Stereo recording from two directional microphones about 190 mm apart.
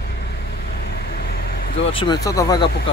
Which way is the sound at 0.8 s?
55° left (ahead or behind).